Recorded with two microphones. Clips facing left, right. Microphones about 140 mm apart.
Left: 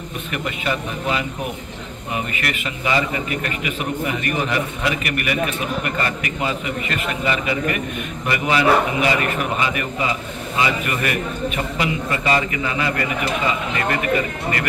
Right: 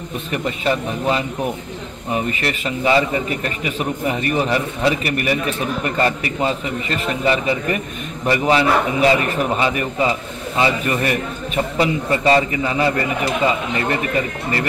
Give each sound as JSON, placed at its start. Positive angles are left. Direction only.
{"t": 0.3, "sound": "a man's voice", "side_deg": -35}